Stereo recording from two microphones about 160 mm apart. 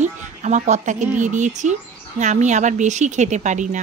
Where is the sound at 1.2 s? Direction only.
50° right (ahead or behind).